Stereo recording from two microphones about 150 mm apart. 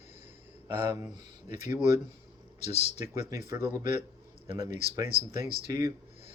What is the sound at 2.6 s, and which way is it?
Speech, 45° left (ahead or behind).